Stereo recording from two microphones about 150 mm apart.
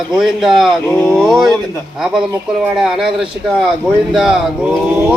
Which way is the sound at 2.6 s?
5° right (ahead or behind).